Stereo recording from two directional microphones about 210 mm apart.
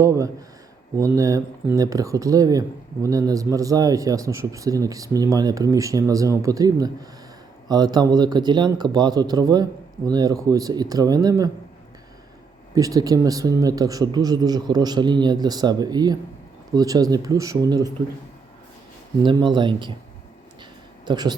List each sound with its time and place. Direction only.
0.0 s speech: 15° right (ahead or behind)
12.7 s speech: 15° right (ahead or behind)
19.2 s speech: 20° right (ahead or behind)
21.0 s speech: 20° right (ahead or behind)